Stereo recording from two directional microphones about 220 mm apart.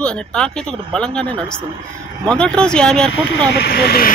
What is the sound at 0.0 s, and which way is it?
Speech, 5° left (ahead or behind).